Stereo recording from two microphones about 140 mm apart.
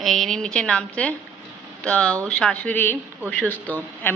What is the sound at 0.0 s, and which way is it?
A woman's voice, centre (ahead or behind).